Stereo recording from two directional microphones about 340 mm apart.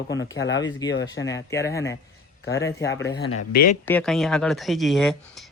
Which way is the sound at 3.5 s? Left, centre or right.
Left.